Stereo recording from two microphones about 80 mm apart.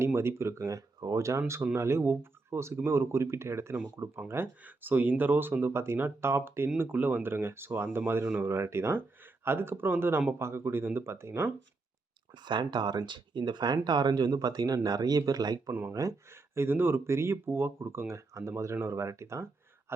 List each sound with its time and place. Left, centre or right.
0.0 s speech: right
4.6 s speech: right
12.5 s speech: right
13.1 s speech: right
15.9 s speech: right